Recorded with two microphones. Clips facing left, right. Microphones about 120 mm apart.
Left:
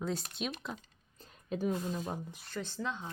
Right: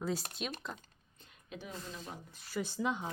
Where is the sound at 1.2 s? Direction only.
40° left (ahead or behind).